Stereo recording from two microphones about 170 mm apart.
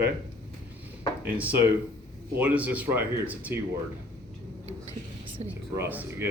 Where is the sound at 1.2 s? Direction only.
10° right (ahead or behind).